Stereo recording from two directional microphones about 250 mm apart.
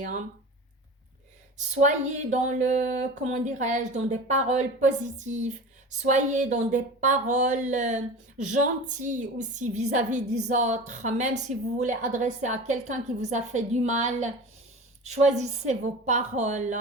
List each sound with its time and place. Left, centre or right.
1.5 s speech: right